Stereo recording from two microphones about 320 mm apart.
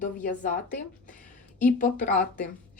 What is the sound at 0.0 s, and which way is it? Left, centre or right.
Speech, left.